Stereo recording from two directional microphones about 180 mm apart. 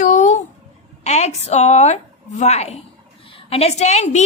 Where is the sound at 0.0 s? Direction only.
45° left (ahead or behind).